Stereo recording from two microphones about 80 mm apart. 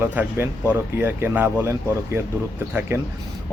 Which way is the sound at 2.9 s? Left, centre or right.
Right.